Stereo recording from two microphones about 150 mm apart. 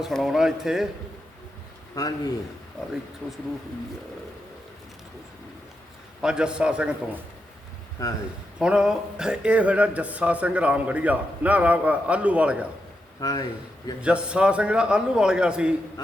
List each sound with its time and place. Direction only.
0.0 s speech: centre (ahead or behind)
2.0 s a man's voice: 25° left (ahead or behind)
6.2 s speech: 5° right (ahead or behind)
8.0 s a man's voice: 25° left (ahead or behind)
8.5 s speech: 5° right (ahead or behind)
13.1 s speech: 25° left (ahead or behind)
14.0 s speech: 5° right (ahead or behind)